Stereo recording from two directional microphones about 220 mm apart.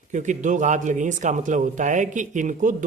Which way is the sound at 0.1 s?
35° right (ahead or behind).